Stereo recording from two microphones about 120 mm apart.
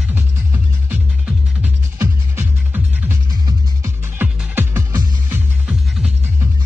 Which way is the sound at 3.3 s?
35° right (ahead or behind).